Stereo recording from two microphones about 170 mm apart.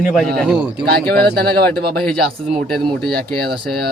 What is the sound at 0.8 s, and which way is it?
Speech, 65° right (ahead or behind).